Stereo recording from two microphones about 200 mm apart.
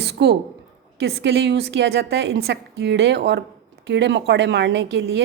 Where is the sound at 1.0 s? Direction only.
55° right (ahead or behind).